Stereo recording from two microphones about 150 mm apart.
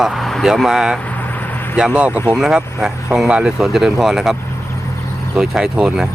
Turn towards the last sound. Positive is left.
turn(degrees=-5)  # may be behind; listen again after turning